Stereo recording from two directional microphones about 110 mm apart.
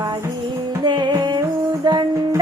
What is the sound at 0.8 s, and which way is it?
Music, 40° right (ahead or behind).